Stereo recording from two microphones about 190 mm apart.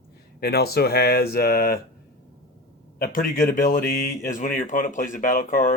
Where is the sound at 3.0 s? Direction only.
45° left (ahead or behind).